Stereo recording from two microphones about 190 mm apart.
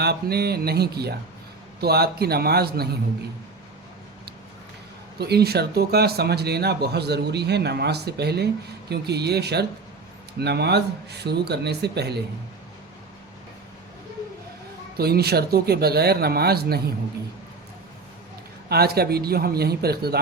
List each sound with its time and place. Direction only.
0.0 s speech: 55° right (ahead or behind)
5.1 s speech: 60° right (ahead or behind)
14.9 s speech: 55° right (ahead or behind)
18.7 s speech: 55° right (ahead or behind)